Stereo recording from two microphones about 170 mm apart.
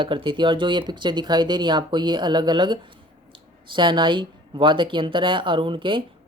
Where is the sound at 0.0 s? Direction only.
30° right (ahead or behind).